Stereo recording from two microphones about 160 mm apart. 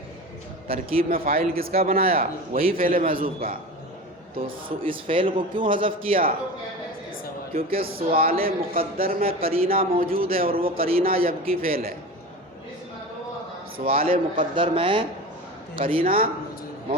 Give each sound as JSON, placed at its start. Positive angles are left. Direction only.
{"t": 0.7, "sound": "a man's voice", "side_deg": -65}
{"t": 4.4, "sound": "a man's voice", "side_deg": -35}
{"t": 7.5, "sound": "a man's voice", "side_deg": -65}
{"t": 13.7, "sound": "a man's voice", "side_deg": -65}
{"t": 14.5, "sound": "a man's voice", "side_deg": -30}
{"t": 16.0, "sound": "a man's voice", "side_deg": -65}